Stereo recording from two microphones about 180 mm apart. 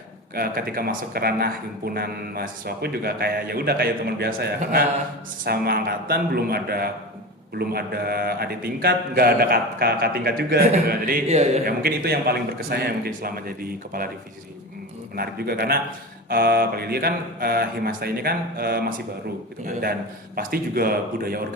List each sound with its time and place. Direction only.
0.3 s speech: 55° right (ahead or behind)
11.3 s a man's voice: 35° right (ahead or behind)
11.6 s speech: 60° right (ahead or behind)
15.1 s speech: 60° right (ahead or behind)